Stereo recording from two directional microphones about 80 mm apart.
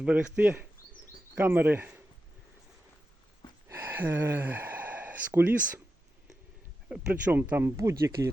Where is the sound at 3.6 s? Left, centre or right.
Right.